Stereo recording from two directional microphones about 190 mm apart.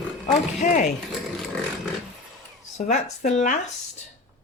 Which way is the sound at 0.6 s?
40° left (ahead or behind).